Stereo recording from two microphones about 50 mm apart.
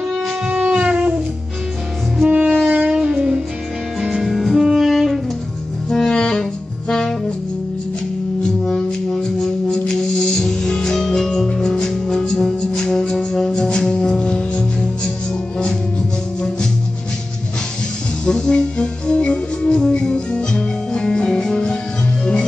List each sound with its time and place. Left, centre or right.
0.5 s wind instrument: right
2.2 s saxophone: right
2.6 s a sound: right
2.9 s music: centre
4.0 s music: centre
4.6 s saxophone: centre
5.9 s music: centre
8.4 s music: centre
18.2 s music: centre